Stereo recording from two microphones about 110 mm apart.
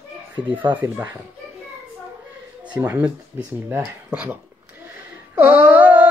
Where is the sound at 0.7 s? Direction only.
20° right (ahead or behind).